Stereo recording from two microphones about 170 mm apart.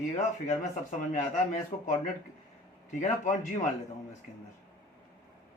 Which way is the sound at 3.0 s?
45° left (ahead or behind).